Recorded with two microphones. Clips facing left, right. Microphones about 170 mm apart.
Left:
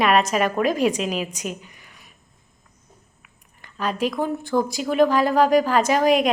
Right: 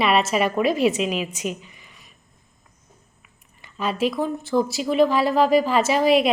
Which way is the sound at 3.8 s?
5° right (ahead or behind).